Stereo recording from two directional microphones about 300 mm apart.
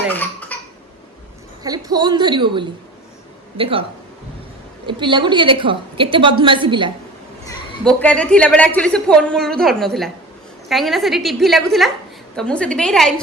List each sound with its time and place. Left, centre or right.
0.1 s cough: centre
1.6 s a woman's voice: centre
4.9 s a woman's voice: centre
7.4 s a woman's voice: centre